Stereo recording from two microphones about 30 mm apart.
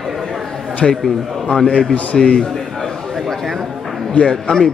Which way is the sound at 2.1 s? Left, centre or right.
Centre.